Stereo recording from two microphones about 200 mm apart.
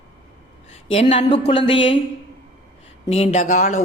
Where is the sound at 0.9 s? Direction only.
30° left (ahead or behind).